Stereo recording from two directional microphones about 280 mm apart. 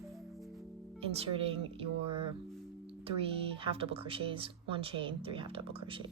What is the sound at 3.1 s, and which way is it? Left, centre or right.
Speech, centre.